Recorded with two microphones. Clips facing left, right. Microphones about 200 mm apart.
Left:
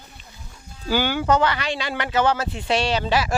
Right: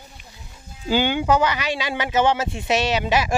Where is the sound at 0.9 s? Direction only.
20° right (ahead or behind).